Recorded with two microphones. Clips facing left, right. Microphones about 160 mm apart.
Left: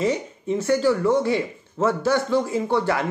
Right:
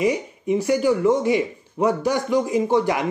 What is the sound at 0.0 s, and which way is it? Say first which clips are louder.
Speech: right 2 dB; 15° right (ahead or behind).